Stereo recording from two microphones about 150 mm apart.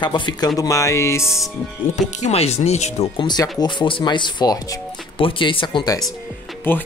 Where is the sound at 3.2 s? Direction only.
30° left (ahead or behind).